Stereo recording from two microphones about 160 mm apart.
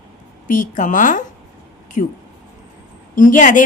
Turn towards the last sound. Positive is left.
turn(degrees=55)  # may be behind; listen again after turning